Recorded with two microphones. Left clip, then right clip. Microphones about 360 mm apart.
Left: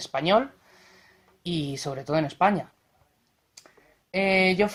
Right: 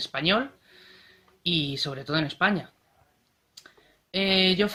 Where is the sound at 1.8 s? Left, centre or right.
Centre.